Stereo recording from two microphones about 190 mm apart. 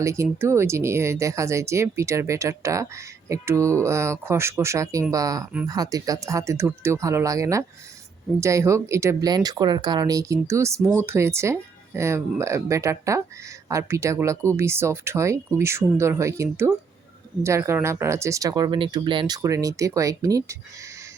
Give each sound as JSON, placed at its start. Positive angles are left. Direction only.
{"t": 0.0, "sound": "speech", "side_deg": -15}